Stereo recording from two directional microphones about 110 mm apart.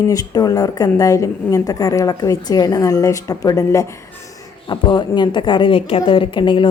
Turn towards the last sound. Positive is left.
turn(degrees=45)  # may be behind; listen again after turning